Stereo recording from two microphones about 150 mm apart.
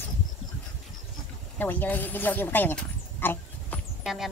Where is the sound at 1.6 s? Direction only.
10° left (ahead or behind).